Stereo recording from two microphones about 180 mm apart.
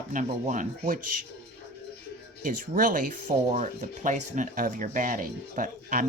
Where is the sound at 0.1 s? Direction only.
45° right (ahead or behind).